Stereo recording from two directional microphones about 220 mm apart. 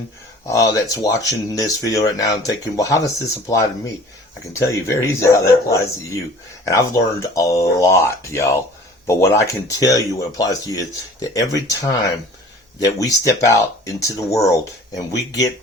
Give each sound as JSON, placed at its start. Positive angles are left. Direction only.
{"t": 0.4, "sound": "speech", "side_deg": 15}